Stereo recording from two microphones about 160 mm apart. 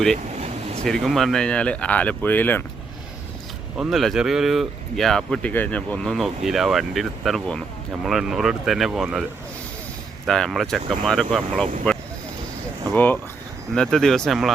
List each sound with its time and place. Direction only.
0.3 s vehicle: 45° right (ahead or behind)
0.9 s speech: centre (ahead or behind)
3.8 s speech: centre (ahead or behind)
10.2 s speech: 5° left (ahead or behind)
12.9 s speech: 10° left (ahead or behind)